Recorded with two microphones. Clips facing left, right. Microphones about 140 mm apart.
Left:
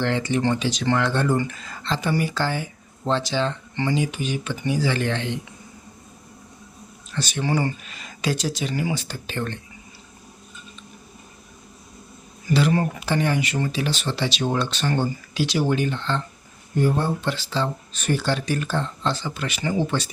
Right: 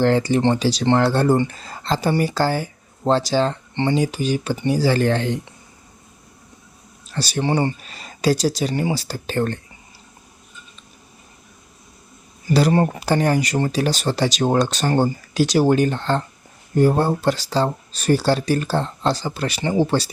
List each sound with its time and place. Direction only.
0.0 s speech: 35° right (ahead or behind)
7.1 s speech: 35° right (ahead or behind)
12.5 s speech: 35° right (ahead or behind)